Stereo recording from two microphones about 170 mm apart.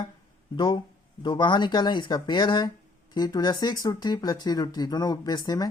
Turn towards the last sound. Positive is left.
turn(degrees=25)  # may be behind; listen again after turning